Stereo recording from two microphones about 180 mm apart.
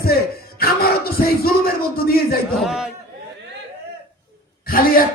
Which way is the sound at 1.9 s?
55° left (ahead or behind).